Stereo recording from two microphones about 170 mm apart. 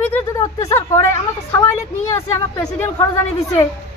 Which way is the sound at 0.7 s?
15° left (ahead or behind).